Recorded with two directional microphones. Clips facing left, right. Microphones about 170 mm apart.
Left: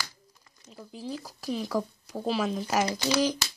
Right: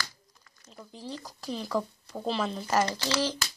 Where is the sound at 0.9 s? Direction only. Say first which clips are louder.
Left 3 dB; 5° left (ahead or behind).